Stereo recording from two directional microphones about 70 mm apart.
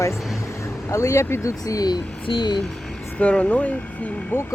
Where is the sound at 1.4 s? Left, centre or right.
Left.